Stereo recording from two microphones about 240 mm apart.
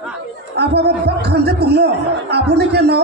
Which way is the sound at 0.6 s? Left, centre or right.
Right.